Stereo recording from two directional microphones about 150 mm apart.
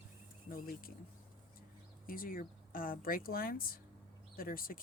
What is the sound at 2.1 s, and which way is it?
Speech, 70° left (ahead or behind).